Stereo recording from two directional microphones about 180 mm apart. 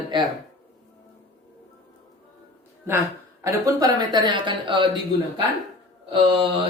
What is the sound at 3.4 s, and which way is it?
Speech, 20° right (ahead or behind).